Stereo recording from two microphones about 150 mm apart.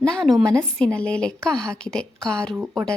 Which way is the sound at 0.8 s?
5° left (ahead or behind).